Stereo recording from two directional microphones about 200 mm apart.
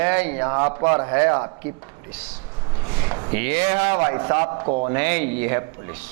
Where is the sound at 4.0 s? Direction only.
25° right (ahead or behind).